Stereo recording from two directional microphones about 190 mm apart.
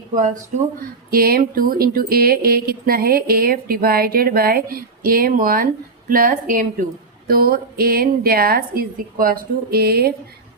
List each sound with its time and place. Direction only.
1.1 s speech: 50° right (ahead or behind)